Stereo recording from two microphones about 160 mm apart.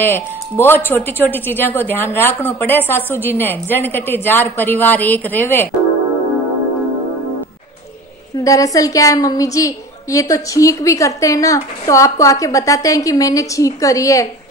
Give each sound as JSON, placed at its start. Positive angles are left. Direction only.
{"t": 0.0, "sound": "a woman's voice", "side_deg": 15}
{"t": 8.5, "sound": "a woman's voice", "side_deg": 20}